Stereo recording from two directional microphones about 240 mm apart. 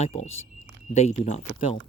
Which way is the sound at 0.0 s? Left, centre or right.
Left.